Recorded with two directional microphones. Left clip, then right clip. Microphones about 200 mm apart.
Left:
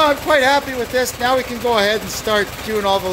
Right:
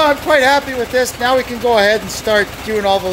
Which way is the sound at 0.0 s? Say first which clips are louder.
Right 2 dB; 5° right (ahead or behind).